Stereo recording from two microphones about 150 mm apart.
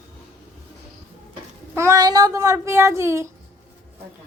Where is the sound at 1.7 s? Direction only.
20° right (ahead or behind).